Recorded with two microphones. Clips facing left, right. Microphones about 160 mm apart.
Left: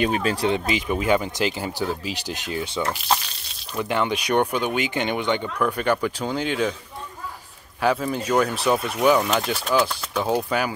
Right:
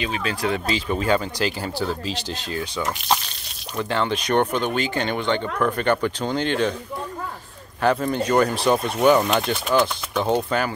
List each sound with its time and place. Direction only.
0.0 s speech: 45° left (ahead or behind)
0.5 s speech: 20° left (ahead or behind)
3.9 s speech: 10° left (ahead or behind)
7.8 s speech: 5° left (ahead or behind)